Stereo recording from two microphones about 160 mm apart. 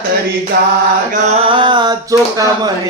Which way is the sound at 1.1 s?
40° right (ahead or behind).